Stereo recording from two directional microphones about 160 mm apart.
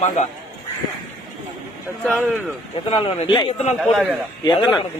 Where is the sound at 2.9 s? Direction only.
35° left (ahead or behind).